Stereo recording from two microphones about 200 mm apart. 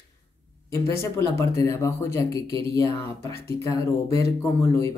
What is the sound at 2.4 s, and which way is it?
Speech, 25° right (ahead or behind).